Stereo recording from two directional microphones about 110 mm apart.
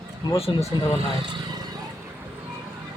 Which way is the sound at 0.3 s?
65° left (ahead or behind).